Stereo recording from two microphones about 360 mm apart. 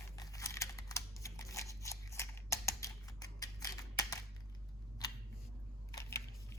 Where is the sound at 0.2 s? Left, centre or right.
Centre.